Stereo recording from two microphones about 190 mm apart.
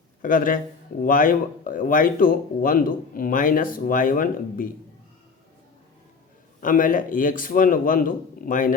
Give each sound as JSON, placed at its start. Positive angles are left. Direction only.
{"t": 0.2, "sound": "speech", "side_deg": 45}
{"t": 6.6, "sound": "speech", "side_deg": 45}